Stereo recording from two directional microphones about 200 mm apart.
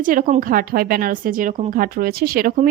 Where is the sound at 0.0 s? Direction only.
40° right (ahead or behind).